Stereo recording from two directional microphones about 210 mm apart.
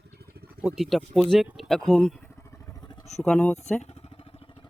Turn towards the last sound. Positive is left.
turn(degrees=5)  # may be behind; listen again after turning